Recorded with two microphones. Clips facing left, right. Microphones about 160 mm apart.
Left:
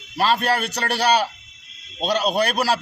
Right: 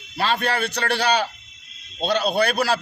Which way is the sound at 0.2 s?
40° left (ahead or behind).